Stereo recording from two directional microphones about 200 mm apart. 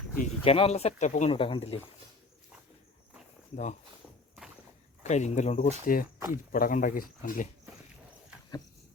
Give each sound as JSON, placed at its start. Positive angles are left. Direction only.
{"t": 0.4, "sound": "speech", "side_deg": 30}
{"t": 1.3, "sound": "speech", "side_deg": 25}
{"t": 3.5, "sound": "speech", "side_deg": 35}
{"t": 5.0, "sound": "speech", "side_deg": 35}
{"t": 6.1, "sound": "speech", "side_deg": -15}
{"t": 6.5, "sound": "speech", "side_deg": 40}